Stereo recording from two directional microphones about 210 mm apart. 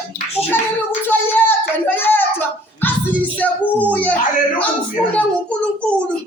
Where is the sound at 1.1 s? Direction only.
10° left (ahead or behind).